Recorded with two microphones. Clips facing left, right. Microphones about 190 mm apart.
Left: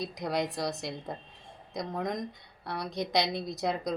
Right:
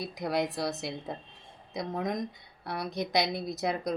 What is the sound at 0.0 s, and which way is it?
Speech, 5° right (ahead or behind).